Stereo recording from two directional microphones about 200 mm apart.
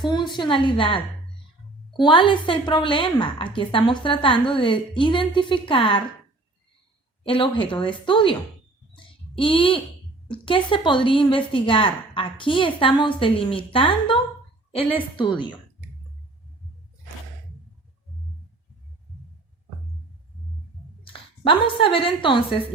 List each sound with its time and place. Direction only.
0.0 s a woman's voice: 20° left (ahead or behind)
7.3 s a woman's voice: 25° left (ahead or behind)
9.0 s a sound: 25° left (ahead or behind)
10.2 s a woman's voice: 25° left (ahead or behind)
21.0 s a woman's voice: 25° left (ahead or behind)